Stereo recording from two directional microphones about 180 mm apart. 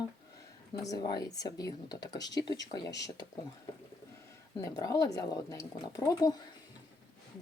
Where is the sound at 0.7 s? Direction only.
20° left (ahead or behind).